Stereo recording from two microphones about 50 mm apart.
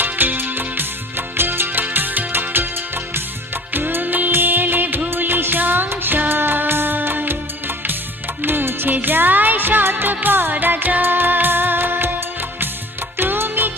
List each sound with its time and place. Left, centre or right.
0.0 s music: right
3.8 s music: right
8.4 s music: right
13.1 s music: right